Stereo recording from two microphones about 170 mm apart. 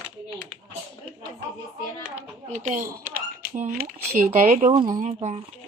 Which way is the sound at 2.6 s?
55° right (ahead or behind).